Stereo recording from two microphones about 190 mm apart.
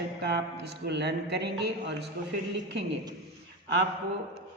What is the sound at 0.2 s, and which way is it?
A man's voice, 60° right (ahead or behind).